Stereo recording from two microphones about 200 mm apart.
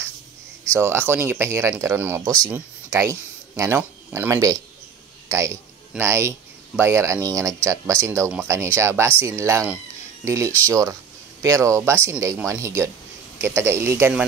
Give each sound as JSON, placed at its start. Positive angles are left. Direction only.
{"t": 0.7, "sound": "speech", "side_deg": -10}